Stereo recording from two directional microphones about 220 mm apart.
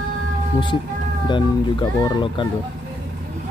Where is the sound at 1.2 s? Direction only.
20° left (ahead or behind).